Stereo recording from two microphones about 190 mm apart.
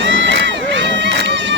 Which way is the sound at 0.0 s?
75° right (ahead or behind).